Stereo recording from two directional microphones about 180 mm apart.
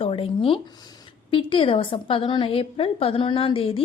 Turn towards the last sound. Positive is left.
turn(degrees=30)  # may be behind; listen again after turning